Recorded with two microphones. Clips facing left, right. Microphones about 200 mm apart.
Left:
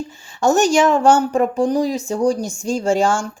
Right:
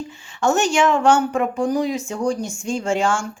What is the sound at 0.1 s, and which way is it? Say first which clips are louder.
A woman's voice: left 3 dB; 40° left (ahead or behind).